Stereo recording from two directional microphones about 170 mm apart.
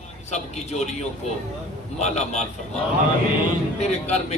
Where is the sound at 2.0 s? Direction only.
40° left (ahead or behind).